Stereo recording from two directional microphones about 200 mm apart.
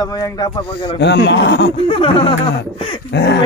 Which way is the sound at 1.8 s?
25° left (ahead or behind).